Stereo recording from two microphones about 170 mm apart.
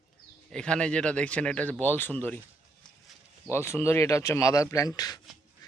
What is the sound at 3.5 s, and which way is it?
Speech, 15° left (ahead or behind).